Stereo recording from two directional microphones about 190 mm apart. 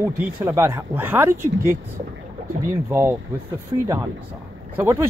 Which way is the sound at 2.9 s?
15° right (ahead or behind).